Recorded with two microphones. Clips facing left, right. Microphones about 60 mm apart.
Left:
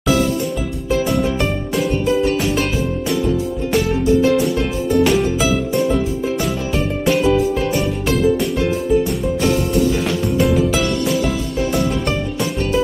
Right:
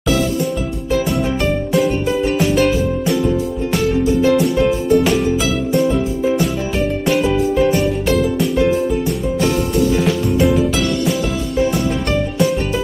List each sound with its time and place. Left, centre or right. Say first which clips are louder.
3.7 s music: left 1 dB; centre